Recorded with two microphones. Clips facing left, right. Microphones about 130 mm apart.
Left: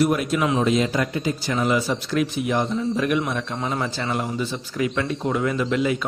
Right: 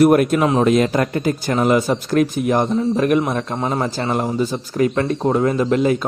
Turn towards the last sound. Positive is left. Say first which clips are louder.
# right 6 dB
turn(degrees=-40)  # may be behind; listen again after turning